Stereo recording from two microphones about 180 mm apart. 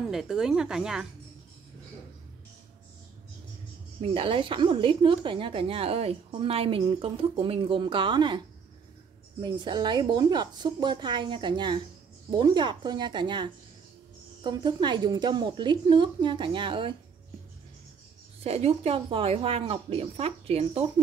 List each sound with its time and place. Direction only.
0.1 s speech: 5° right (ahead or behind)
4.0 s speech: 30° right (ahead or behind)
9.4 s speech: 25° right (ahead or behind)
18.4 s speech: 35° right (ahead or behind)